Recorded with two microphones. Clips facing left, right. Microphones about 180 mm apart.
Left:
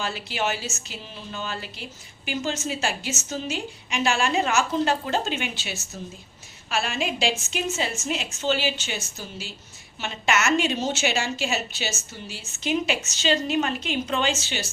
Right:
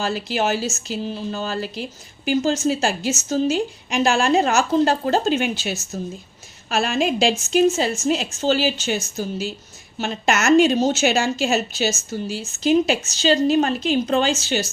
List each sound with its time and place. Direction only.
0.0 s speech: 40° right (ahead or behind)